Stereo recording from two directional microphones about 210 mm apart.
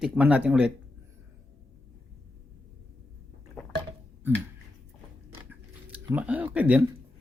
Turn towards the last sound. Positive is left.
turn(degrees=-5)  # may be behind; listen again after turning